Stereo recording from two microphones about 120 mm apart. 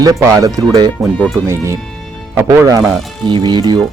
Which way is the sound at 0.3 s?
30° right (ahead or behind).